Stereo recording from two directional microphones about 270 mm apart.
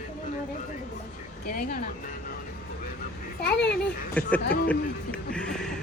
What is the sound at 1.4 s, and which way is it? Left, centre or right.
Speech, left.